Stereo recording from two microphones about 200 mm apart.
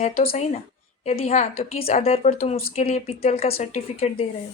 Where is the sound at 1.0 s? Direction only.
30° left (ahead or behind).